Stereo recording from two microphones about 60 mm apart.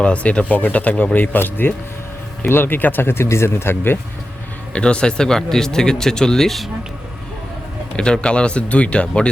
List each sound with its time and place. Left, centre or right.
0.0 s speech: left
4.7 s speech: centre
7.9 s speech: centre